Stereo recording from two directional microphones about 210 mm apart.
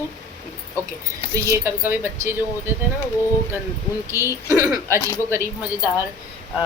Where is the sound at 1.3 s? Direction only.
15° right (ahead or behind).